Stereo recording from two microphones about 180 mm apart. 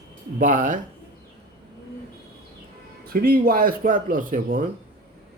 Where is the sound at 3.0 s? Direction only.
55° right (ahead or behind).